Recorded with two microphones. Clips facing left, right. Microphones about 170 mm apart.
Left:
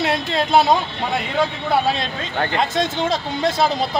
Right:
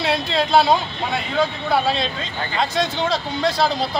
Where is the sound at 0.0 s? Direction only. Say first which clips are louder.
Left 1 dB; 50° left (ahead or behind).